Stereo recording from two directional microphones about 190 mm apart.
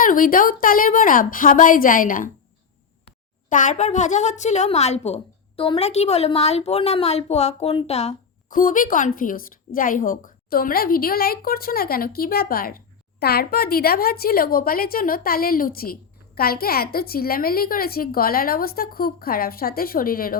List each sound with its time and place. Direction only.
0.0 s speech: 45° left (ahead or behind)
3.5 s a woman's voice: 40° left (ahead or behind)